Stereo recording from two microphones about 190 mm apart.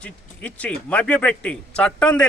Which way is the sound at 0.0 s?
5° left (ahead or behind).